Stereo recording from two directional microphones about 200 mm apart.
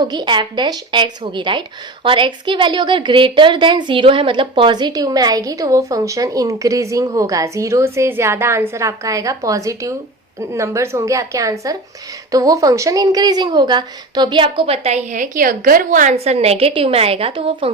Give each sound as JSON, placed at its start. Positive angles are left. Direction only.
{"t": 0.0, "sound": "a woman's voice", "side_deg": -20}